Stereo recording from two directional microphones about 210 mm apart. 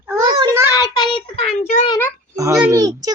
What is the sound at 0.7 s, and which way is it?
A child's voice, 20° left (ahead or behind).